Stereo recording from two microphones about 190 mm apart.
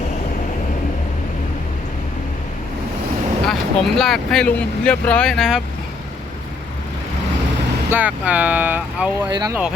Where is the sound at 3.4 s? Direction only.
Centre (ahead or behind).